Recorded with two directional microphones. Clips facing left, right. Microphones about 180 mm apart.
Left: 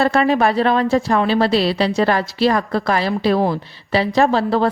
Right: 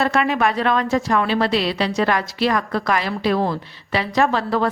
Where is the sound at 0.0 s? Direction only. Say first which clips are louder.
Left 4 dB; 35° left (ahead or behind).